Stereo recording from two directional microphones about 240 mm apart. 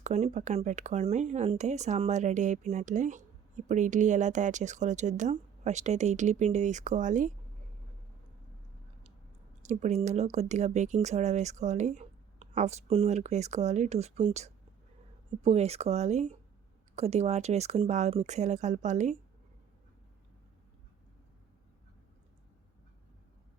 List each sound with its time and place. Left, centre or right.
0.0 s speech: right
9.6 s speech: right